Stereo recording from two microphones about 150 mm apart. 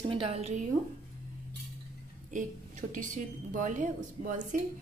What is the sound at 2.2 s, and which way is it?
A woman's voice, 55° right (ahead or behind).